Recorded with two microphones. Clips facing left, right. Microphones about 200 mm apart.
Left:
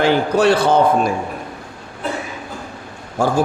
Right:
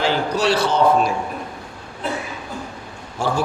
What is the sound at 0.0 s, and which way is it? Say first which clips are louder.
A man's voice: left 5 dB; 55° left (ahead or behind).